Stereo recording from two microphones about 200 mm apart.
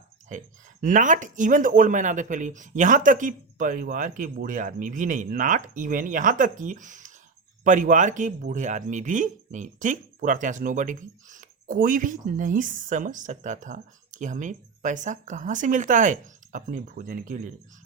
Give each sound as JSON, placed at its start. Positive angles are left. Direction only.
{"t": 0.3, "sound": "speech", "side_deg": -40}